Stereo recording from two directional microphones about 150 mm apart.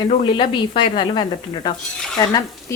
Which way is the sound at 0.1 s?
40° left (ahead or behind).